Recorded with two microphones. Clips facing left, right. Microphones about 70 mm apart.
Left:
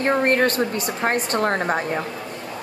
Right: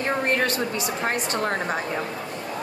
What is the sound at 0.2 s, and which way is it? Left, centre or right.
A woman's voice, left.